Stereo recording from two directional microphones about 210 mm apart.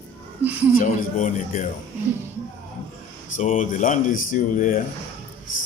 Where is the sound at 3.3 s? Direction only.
35° left (ahead or behind).